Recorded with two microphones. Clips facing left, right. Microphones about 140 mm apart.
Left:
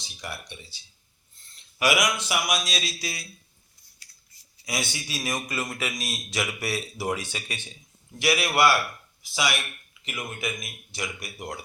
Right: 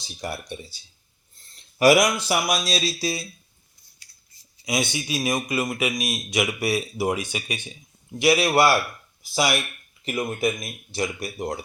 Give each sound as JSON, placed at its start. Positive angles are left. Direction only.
{"t": 0.2, "sound": "speech", "side_deg": -40}
{"t": 4.6, "sound": "a man's voice", "side_deg": -20}
{"t": 8.2, "sound": "a man's voice", "side_deg": -25}
{"t": 9.3, "sound": "speech", "side_deg": -40}